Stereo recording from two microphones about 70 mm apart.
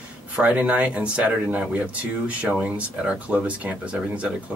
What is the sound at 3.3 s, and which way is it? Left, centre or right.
Speech, centre.